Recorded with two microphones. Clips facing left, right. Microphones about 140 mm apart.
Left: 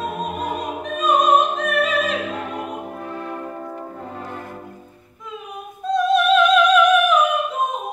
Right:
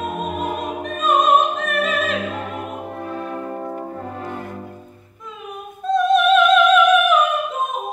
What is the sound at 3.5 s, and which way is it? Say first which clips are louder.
Brass instrument: right 4 dB; 35° right (ahead or behind).